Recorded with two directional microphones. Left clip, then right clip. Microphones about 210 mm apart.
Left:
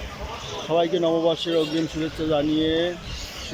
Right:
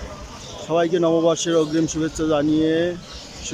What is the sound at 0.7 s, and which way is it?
Speech, 10° right (ahead or behind).